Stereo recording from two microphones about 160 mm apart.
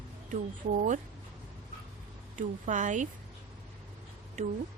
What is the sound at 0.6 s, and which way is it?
Speech, 55° right (ahead or behind).